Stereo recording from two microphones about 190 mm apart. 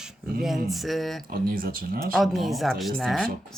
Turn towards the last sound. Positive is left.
turn(degrees=0)  # may be behind; listen again after turning